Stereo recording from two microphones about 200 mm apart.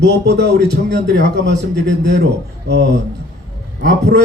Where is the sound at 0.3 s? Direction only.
55° right (ahead or behind).